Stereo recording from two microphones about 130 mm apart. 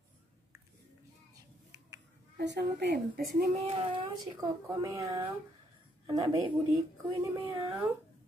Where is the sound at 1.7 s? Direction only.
30° right (ahead or behind).